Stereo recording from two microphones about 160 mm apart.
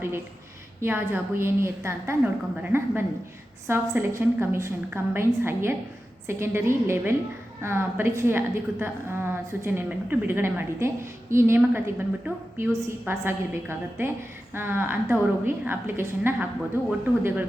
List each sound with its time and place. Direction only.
0.8 s a woman's voice: 15° right (ahead or behind)